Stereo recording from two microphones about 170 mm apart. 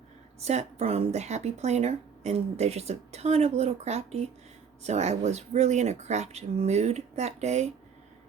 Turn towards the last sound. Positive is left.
turn(degrees=-40)  # may be behind; listen again after turning